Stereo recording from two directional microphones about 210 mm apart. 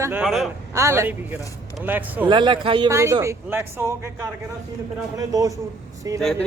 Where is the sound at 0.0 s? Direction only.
5° right (ahead or behind).